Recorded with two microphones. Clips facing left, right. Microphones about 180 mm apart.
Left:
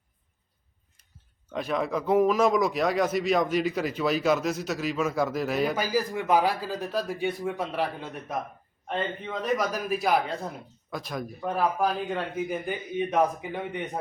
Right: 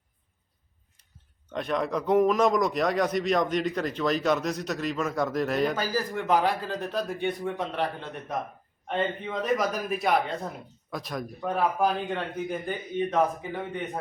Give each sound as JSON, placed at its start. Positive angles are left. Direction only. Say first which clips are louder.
{"t": 1.5, "sound": "speech", "louder": "even", "side_deg": 5}